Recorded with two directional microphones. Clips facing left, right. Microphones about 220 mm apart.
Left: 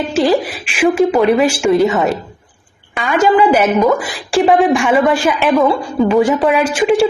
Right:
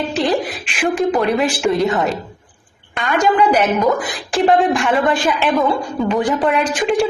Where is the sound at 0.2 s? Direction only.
Centre (ahead or behind).